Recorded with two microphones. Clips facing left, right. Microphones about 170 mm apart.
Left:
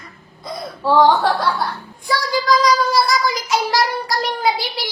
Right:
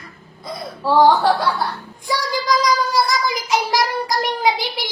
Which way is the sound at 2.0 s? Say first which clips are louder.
Left 2 dB; 15° right (ahead or behind).